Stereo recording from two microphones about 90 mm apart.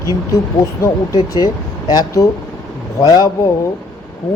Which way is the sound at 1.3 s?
45° left (ahead or behind).